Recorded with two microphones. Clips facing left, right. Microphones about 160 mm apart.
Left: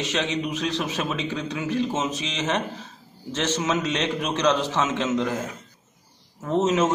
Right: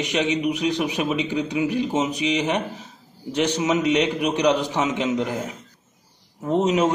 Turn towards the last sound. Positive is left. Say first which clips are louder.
# right 2 dB
turn(degrees=-15)  # may be behind; listen again after turning